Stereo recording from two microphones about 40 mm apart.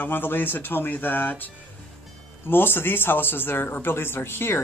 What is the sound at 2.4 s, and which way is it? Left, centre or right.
Speech, left.